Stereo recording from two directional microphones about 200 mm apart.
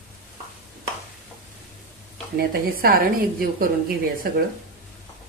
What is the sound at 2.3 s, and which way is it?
A woman's voice, 50° right (ahead or behind).